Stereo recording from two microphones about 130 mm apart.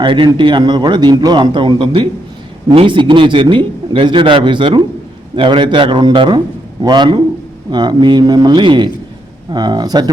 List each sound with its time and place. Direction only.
0.0 s a man's voice: 40° right (ahead or behind)